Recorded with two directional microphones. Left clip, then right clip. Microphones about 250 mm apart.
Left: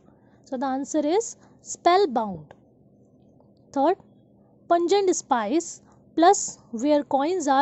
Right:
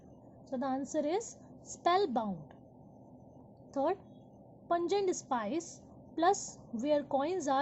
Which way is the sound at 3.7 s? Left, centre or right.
Left.